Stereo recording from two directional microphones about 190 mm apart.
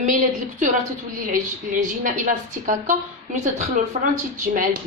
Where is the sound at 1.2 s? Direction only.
45° right (ahead or behind).